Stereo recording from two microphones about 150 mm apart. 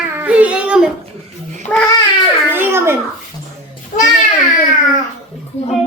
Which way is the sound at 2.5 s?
15° right (ahead or behind).